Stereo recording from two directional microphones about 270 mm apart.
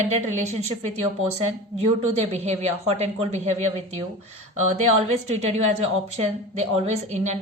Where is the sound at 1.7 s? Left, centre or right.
Right.